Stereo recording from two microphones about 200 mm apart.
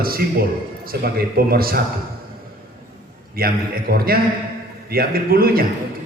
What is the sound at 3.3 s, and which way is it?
A man's voice, 50° right (ahead or behind).